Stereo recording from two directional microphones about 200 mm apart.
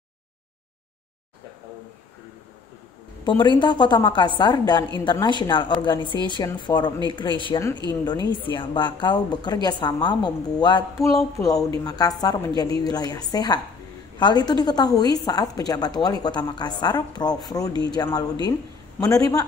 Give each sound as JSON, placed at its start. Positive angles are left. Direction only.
{"t": 3.3, "sound": "a woman's voice", "side_deg": 25}
{"t": 11.8, "sound": "a woman's voice", "side_deg": 20}